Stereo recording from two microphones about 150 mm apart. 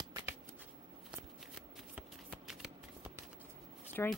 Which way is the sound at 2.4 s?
Centre (ahead or behind).